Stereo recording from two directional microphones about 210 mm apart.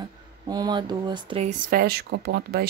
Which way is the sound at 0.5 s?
20° right (ahead or behind).